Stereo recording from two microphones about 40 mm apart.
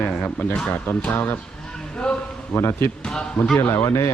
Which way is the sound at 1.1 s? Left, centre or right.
Left.